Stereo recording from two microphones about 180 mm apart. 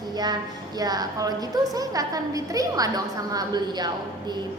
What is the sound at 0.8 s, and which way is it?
A woman's voice, 20° right (ahead or behind).